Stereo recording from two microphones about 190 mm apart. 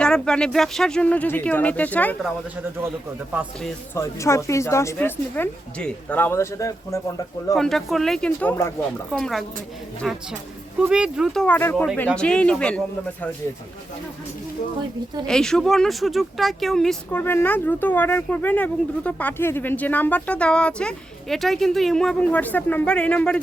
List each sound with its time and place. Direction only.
0.0 s speech: 5° left (ahead or behind)
3.9 s speech: 15° left (ahead or behind)
7.5 s speech: centre (ahead or behind)
10.8 s speech: 5° right (ahead or behind)
15.3 s speech: 5° left (ahead or behind)